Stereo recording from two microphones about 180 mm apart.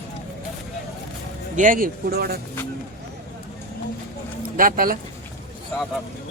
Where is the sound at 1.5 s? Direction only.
45° right (ahead or behind).